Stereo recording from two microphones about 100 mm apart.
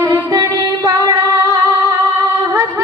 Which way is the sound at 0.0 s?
30° right (ahead or behind).